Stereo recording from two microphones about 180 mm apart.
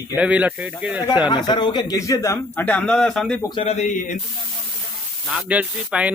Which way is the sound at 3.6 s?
40° left (ahead or behind).